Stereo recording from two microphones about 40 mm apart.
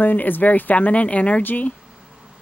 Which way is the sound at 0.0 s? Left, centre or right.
Left.